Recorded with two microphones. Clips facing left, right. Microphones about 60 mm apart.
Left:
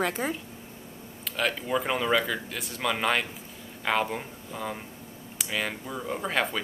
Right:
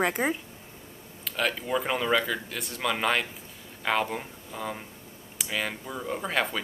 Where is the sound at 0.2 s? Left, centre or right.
Right.